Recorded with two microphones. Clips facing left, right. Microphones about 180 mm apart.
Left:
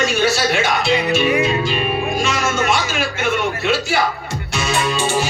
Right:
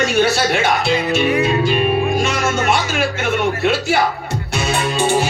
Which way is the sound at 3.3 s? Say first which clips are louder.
Right 3 dB; 55° right (ahead or behind).